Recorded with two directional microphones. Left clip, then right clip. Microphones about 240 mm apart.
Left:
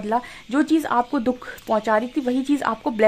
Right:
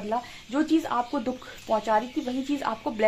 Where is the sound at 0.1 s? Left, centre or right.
Left.